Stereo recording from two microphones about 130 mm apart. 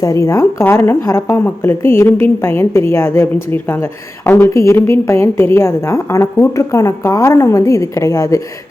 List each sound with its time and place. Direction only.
0.0 s speech: 25° left (ahead or behind)